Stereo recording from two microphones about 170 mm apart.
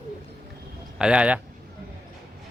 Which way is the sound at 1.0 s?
5° right (ahead or behind).